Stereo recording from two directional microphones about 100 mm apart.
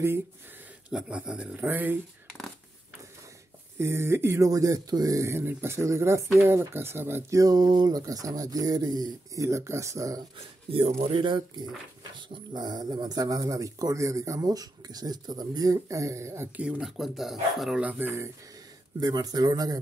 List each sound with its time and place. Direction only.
0.8 s speech: 10° right (ahead or behind)
2.2 s a sound: 5° left (ahead or behind)
3.7 s speech: 25° right (ahead or behind)
7.3 s speech: 40° right (ahead or behind)
10.7 s speech: 75° right (ahead or behind); by 16.4 s 30° right (ahead or behind)
16.5 s speech: 10° right (ahead or behind)
17.8 s speech: 20° right (ahead or behind)
18.9 s speech: 40° right (ahead or behind)